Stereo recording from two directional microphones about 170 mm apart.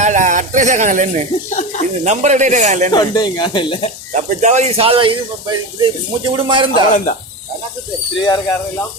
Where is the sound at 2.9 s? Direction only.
25° left (ahead or behind).